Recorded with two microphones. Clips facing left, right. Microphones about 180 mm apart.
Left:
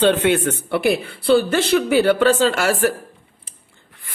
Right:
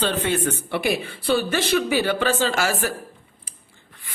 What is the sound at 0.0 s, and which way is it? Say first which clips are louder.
Speech: left 7 dB; 65° left (ahead or behind).